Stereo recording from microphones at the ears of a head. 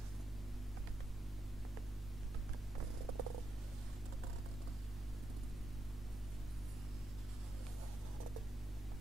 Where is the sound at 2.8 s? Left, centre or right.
Right.